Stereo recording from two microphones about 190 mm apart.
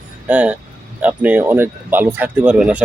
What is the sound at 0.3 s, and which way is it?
Speech, 5° right (ahead or behind).